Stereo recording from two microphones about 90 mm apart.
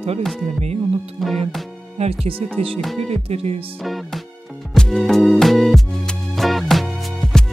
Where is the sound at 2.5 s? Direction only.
90° right.